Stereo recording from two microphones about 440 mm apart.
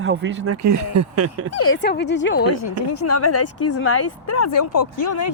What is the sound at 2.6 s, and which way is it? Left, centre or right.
Speech, left.